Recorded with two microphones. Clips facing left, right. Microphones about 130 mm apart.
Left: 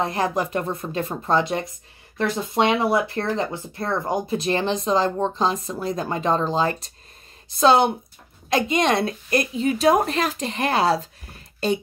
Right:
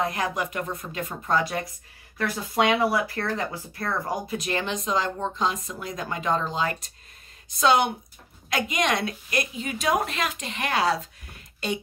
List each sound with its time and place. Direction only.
0.0 s speech: 30° left (ahead or behind)